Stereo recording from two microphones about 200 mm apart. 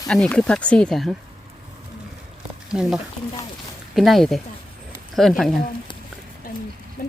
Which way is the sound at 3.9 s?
Centre (ahead or behind).